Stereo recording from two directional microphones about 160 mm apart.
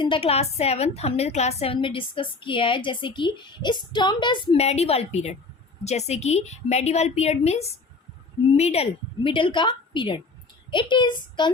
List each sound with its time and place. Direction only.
0.0 s a woman's voice: 35° left (ahead or behind)
4.5 s a woman's voice: 40° left (ahead or behind)